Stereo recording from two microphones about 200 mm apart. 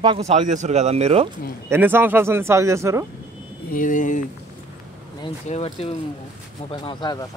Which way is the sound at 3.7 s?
40° left (ahead or behind).